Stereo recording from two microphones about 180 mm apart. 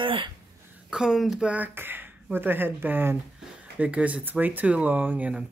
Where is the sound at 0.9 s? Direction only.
Centre (ahead or behind).